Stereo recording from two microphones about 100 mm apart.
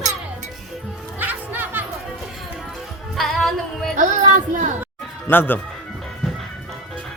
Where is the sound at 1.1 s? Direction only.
20° right (ahead or behind).